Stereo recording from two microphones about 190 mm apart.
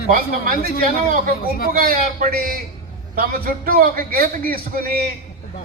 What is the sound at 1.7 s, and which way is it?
A man's voice, 50° right (ahead or behind).